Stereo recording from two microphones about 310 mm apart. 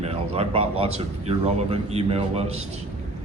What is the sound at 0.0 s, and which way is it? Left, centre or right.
Speech, centre.